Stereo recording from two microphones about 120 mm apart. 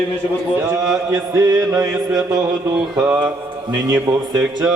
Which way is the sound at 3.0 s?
10° right (ahead or behind).